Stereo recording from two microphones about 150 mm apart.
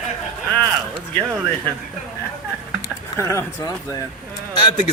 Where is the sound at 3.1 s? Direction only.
20° left (ahead or behind).